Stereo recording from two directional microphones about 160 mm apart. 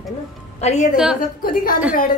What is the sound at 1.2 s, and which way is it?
Speech, 65° left (ahead or behind).